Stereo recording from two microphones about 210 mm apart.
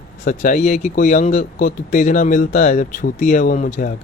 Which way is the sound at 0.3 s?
40° left (ahead or behind).